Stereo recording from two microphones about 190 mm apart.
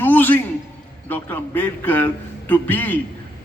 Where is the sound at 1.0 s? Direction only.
10° left (ahead or behind).